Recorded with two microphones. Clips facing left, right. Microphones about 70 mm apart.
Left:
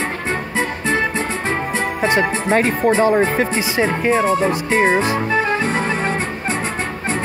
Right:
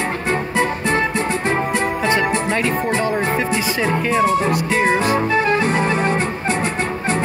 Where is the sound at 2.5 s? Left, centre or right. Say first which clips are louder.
Left 4 dB; left.